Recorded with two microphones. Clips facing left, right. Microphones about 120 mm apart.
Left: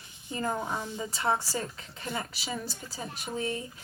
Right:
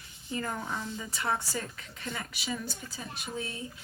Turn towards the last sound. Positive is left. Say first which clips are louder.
# left 4 dB
turn(degrees=40)  # may be behind; listen again after turning